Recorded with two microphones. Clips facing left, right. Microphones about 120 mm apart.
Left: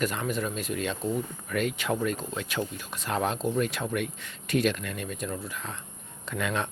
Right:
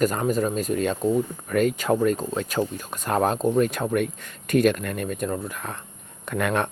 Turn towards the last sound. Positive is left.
turn(degrees=-55)  # may be behind; listen again after turning